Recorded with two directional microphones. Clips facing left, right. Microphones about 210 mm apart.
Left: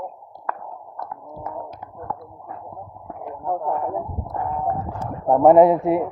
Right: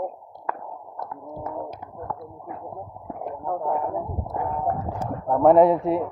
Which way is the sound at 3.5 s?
5° left (ahead or behind).